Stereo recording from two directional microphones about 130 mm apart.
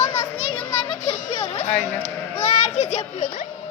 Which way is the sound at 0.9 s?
55° left (ahead or behind).